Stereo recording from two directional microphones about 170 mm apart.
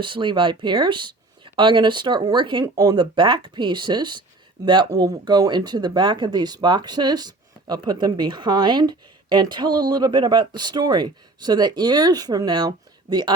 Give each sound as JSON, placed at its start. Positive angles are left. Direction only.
{"t": 0.0, "sound": "speech", "side_deg": -30}